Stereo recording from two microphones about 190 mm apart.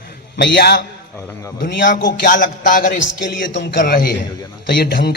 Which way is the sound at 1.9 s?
45° left (ahead or behind).